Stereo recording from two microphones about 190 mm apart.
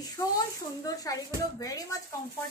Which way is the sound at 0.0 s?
20° left (ahead or behind).